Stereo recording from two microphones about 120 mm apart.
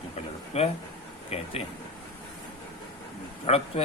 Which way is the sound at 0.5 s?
60° left (ahead or behind).